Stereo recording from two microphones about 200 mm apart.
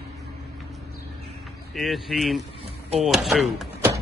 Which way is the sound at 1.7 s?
Centre (ahead or behind).